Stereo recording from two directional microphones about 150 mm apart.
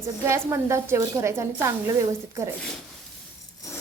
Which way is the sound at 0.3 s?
20° right (ahead or behind).